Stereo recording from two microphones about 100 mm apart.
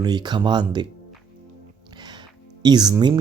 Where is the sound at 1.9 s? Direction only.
45° right (ahead or behind).